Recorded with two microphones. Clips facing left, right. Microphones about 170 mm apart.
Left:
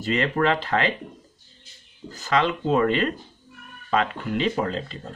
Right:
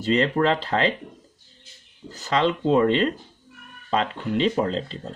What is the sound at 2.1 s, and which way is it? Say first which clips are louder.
Speech: right 1 dB; 35° right (ahead or behind).